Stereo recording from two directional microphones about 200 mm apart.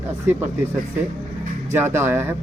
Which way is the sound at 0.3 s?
10° right (ahead or behind).